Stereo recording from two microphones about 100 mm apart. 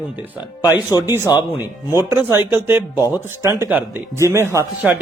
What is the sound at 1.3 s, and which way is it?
Speech, 25° right (ahead or behind).